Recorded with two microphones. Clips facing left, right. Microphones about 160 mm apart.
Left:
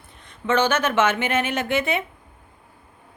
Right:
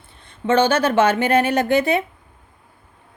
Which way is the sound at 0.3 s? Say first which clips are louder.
Right 4 dB; 30° right (ahead or behind).